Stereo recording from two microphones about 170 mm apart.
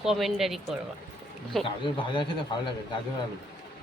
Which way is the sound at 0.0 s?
Centre (ahead or behind).